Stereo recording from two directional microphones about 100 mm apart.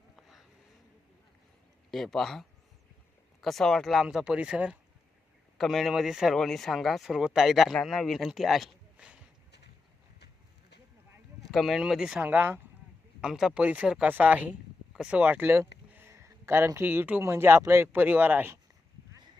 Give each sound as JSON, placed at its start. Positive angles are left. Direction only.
{"t": 0.2, "sound": "a sound", "side_deg": 0}
{"t": 1.9, "sound": "speech", "side_deg": 5}
{"t": 4.0, "sound": "speech", "side_deg": -10}
{"t": 9.0, "sound": "a sound", "side_deg": -10}
{"t": 11.5, "sound": "speech", "side_deg": 0}
{"t": 13.2, "sound": "speech", "side_deg": -5}